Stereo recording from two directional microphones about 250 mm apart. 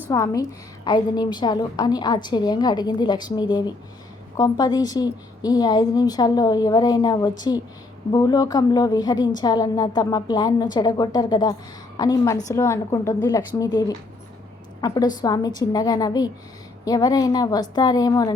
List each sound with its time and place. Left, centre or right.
0.1 s a woman's voice: centre